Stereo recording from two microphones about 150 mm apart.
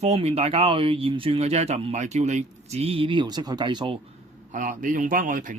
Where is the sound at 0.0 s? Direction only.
45° right (ahead or behind); by 3.9 s 30° right (ahead or behind).